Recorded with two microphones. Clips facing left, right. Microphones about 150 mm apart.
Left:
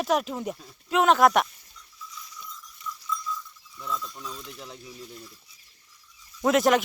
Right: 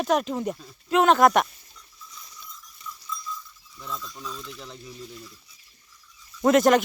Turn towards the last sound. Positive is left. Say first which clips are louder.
# right 3 dB
turn(degrees=0)  # may be behind; listen again after turning